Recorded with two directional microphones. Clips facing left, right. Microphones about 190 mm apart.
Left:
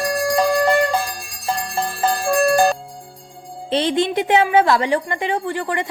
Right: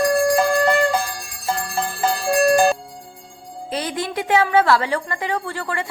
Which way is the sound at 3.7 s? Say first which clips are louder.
Left 7 dB; 25° left (ahead or behind).